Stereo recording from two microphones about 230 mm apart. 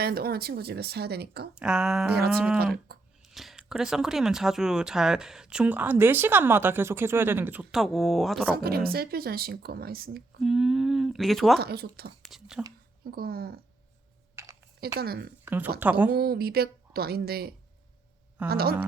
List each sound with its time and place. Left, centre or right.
0.0 s speech: right
1.5 s speech: centre
8.6 s speech: right
10.4 s speech: centre
11.6 s speech: right
12.3 s speech: centre
13.1 s speech: right
14.4 s a sound: centre
14.9 s speech: right
15.4 s a woman's voice: centre
16.1 s speech: right